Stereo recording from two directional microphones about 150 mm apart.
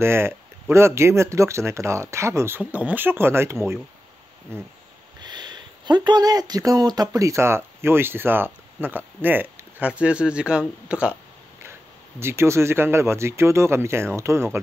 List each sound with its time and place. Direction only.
0.0 s speech: 15° right (ahead or behind)
5.2 s speech: 30° right (ahead or behind); by 11.1 s 10° right (ahead or behind)
12.2 s speech: 15° right (ahead or behind)